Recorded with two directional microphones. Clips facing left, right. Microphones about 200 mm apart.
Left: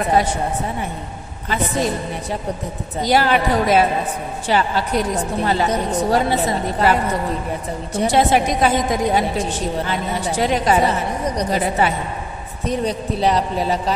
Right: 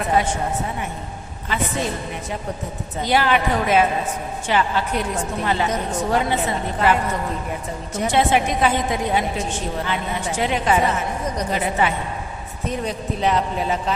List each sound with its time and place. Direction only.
3.0 s a woman's voice: 40° left (ahead or behind)